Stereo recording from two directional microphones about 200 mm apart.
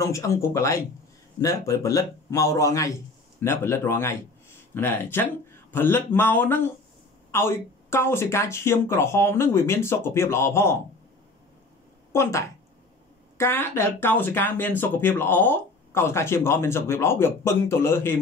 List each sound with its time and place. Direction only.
0.0 s a man's voice: 15° left (ahead or behind)
12.1 s a woman's voice: 15° left (ahead or behind)